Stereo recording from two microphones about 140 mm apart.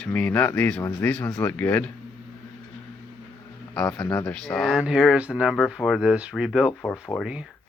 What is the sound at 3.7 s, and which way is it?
Speech, 10° left (ahead or behind).